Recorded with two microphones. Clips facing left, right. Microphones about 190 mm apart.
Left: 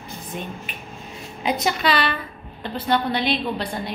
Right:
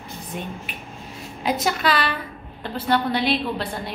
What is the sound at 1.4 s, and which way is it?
A woman's voice, 5° right (ahead or behind).